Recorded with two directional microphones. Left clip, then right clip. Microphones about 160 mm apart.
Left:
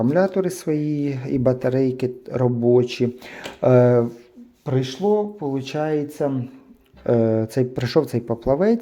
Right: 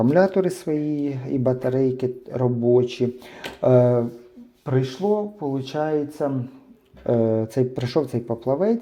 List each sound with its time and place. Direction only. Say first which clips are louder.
0.0 s speech: right 1 dB; 5° right (ahead or behind)
0.6 s speech: left 1 dB; 15° left (ahead or behind)